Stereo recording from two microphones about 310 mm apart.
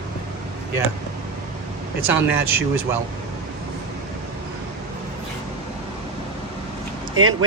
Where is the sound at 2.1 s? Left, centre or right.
Centre.